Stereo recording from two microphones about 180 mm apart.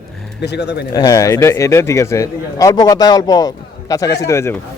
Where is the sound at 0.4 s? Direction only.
70° left (ahead or behind).